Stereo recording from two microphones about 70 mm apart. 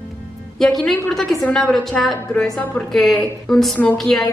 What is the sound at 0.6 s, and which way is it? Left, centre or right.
A woman's voice, centre.